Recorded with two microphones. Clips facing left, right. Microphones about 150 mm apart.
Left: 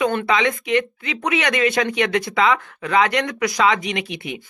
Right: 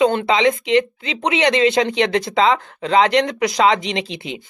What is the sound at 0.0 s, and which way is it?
Speech, 25° right (ahead or behind).